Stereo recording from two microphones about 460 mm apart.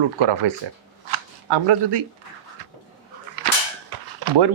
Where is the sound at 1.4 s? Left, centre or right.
Right.